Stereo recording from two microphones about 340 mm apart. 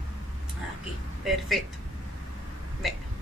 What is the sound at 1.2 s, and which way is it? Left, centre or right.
Speech, centre.